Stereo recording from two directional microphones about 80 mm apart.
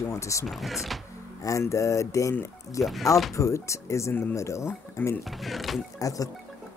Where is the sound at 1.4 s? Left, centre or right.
Left.